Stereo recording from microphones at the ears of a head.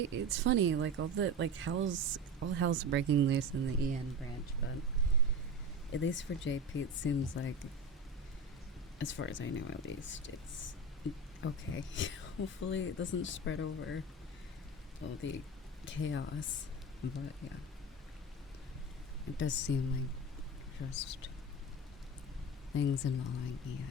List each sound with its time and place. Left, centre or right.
0.0 s speech: right
5.9 s speech: left
9.0 s speech: left
15.0 s speech: left
19.2 s speech: left
22.7 s speech: left